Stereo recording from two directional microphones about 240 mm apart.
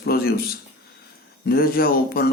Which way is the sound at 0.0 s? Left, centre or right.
Left.